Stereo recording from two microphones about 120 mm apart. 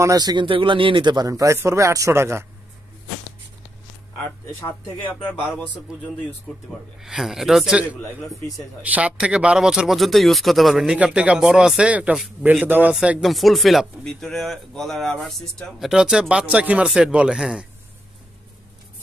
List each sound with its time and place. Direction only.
0.0 s a man's voice: 30° right (ahead or behind)
4.6 s speech: 15° left (ahead or behind)
7.0 s speech: 5° right (ahead or behind)
8.8 s speech: 10° right (ahead or behind)